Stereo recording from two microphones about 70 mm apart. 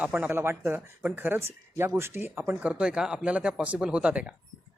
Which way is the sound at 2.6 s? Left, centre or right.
Centre.